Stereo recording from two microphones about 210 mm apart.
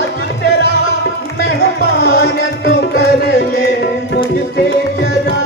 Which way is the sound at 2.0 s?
50° left (ahead or behind).